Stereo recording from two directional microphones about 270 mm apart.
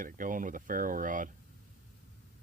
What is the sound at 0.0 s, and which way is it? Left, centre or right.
Speech, right.